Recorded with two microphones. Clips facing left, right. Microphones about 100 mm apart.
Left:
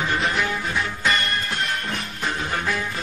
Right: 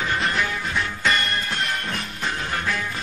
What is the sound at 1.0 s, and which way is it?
Music, centre (ahead or behind).